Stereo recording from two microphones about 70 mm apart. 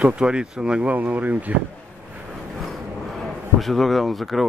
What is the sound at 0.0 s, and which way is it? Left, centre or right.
Speech, centre.